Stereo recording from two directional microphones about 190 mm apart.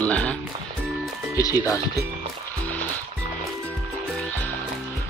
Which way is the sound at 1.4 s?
15° left (ahead or behind).